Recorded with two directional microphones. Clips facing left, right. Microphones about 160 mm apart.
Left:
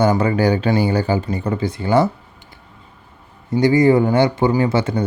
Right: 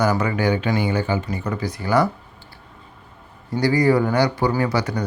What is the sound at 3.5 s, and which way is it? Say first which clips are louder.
Speech: left 4 dB; 20° left (ahead or behind).